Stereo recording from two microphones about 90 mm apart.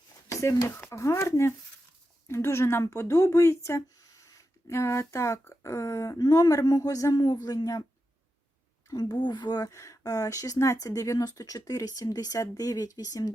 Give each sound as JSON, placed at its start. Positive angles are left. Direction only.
{"t": 0.9, "sound": "speech", "side_deg": 35}
{"t": 9.0, "sound": "speech", "side_deg": 50}
{"t": 9.6, "sound": "speech", "side_deg": 30}